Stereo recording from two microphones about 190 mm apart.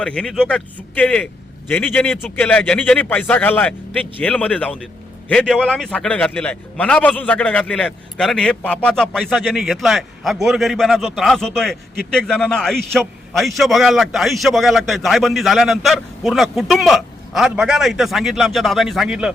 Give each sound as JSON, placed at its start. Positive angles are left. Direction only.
{"t": 0.0, "sound": "a man's voice", "side_deg": 5}